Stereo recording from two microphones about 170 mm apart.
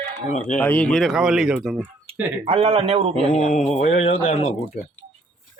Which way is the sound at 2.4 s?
35° right (ahead or behind).